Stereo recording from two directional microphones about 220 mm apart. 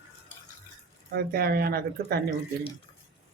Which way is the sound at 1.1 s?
45° right (ahead or behind).